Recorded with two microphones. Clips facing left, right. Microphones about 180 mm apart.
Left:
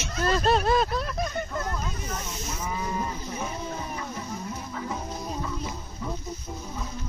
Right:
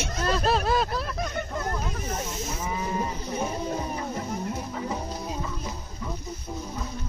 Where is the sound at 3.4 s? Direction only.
35° right (ahead or behind).